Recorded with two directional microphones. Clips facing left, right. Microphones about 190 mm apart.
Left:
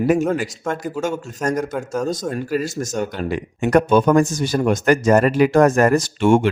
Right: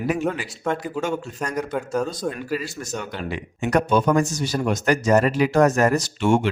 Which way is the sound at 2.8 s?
45° left (ahead or behind).